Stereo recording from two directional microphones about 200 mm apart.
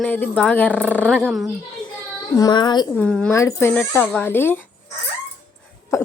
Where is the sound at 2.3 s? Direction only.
20° left (ahead or behind).